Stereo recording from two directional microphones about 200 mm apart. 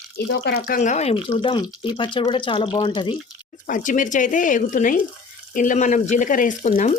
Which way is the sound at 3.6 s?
40° left (ahead or behind).